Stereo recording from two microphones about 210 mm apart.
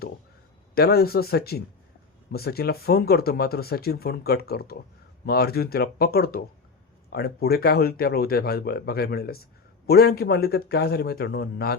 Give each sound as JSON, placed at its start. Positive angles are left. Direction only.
{"t": 0.8, "sound": "speech", "side_deg": 50}